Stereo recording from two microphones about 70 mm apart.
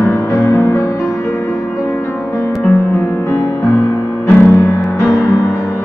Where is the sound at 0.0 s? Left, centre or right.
Left.